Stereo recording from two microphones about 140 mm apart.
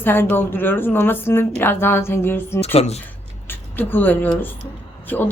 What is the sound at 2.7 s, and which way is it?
Speech, 50° left (ahead or behind).